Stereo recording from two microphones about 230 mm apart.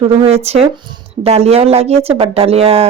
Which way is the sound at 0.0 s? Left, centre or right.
Right.